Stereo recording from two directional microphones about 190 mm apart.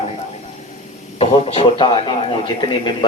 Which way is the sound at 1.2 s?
30° left (ahead or behind).